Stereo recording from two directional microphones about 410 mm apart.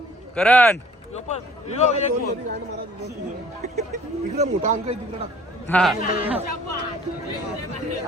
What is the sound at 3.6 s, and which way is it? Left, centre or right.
Speech, centre.